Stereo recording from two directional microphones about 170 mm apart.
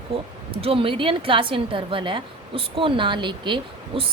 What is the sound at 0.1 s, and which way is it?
A woman's voice, 35° right (ahead or behind).